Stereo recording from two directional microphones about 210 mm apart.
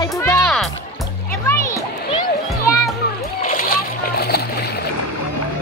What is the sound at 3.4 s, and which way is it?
Splash, 45° left (ahead or behind).